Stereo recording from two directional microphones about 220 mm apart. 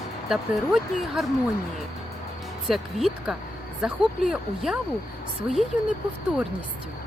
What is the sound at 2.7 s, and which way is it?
A woman's voice, centre (ahead or behind).